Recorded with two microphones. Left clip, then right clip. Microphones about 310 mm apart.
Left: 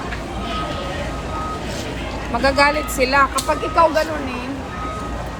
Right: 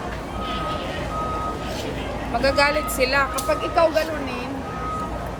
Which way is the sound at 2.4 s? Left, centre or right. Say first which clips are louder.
Left 3 dB; centre.